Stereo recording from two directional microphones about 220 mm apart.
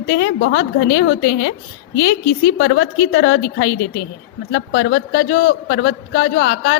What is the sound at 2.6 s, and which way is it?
Speech, 55° left (ahead or behind).